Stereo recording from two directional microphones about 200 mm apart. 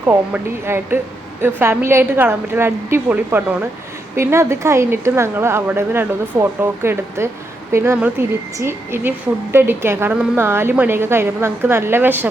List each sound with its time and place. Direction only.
0.6 s a woman's voice: 10° right (ahead or behind)